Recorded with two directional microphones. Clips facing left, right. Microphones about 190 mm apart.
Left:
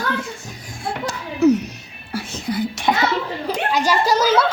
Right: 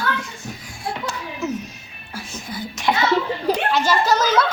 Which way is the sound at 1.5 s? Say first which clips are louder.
Left 11 dB; 70° left (ahead or behind).